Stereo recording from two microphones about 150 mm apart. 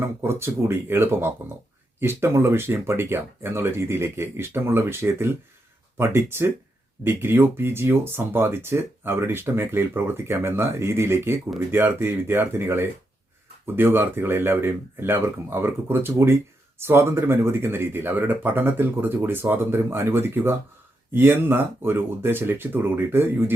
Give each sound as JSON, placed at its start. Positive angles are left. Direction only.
{"t": 0.0, "sound": "speech", "side_deg": -15}